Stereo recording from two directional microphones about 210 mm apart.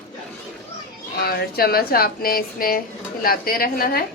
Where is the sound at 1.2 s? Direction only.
45° left (ahead or behind).